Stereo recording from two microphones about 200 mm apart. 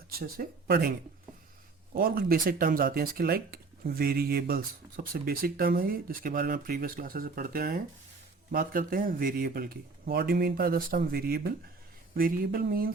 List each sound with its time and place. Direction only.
0.1 s speech: 50° right (ahead or behind)